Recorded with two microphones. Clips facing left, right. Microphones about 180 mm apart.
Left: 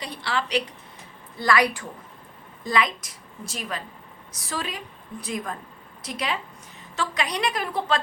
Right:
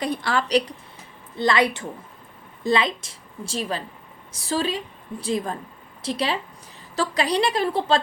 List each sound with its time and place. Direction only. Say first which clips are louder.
0.0 s a woman's voice: right 5 dB; 50° right (ahead or behind)
1.4 s a woman's voice: right 2 dB; 25° right (ahead or behind)